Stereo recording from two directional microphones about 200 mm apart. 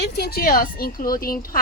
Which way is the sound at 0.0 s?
50° left (ahead or behind).